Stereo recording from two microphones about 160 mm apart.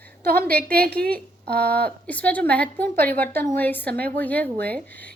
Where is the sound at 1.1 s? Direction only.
10° left (ahead or behind).